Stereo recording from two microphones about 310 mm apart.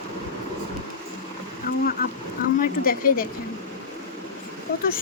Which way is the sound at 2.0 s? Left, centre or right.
Left.